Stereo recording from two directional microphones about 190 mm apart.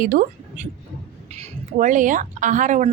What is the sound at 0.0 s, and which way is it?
A woman's voice, 45° right (ahead or behind).